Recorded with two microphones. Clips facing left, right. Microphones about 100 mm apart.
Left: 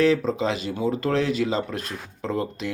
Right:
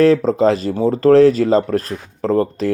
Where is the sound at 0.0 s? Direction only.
40° right (ahead or behind).